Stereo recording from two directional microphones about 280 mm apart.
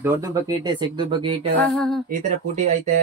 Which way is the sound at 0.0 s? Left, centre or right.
Centre.